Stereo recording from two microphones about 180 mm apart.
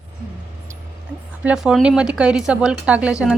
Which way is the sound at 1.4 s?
5° right (ahead or behind).